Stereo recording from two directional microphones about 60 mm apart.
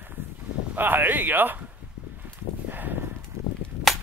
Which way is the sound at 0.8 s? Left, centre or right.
Right.